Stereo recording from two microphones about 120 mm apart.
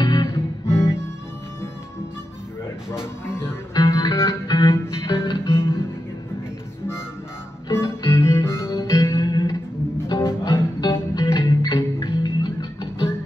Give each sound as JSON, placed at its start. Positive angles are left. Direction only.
{"t": 0.0, "sound": "music", "side_deg": 35}
{"t": 0.7, "sound": "guitar", "side_deg": 25}
{"t": 2.9, "sound": "music", "side_deg": -5}
{"t": 3.9, "sound": "music", "side_deg": 30}
{"t": 7.7, "sound": "music", "side_deg": 25}
{"t": 9.9, "sound": "music", "side_deg": 25}